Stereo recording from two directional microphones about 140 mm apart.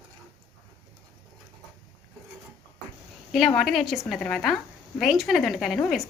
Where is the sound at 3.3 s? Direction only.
Centre (ahead or behind).